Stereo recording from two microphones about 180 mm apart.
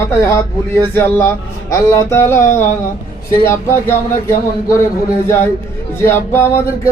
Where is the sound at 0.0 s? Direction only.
15° left (ahead or behind).